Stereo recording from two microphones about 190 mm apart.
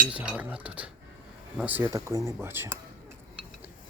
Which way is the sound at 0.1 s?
5° right (ahead or behind).